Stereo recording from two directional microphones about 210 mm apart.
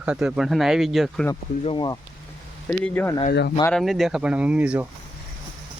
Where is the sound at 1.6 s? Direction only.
20° left (ahead or behind).